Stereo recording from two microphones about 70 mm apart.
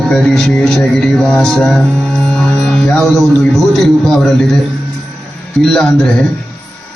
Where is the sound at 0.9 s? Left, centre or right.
Centre.